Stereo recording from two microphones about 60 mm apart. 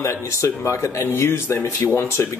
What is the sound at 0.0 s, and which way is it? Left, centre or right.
Speech, left.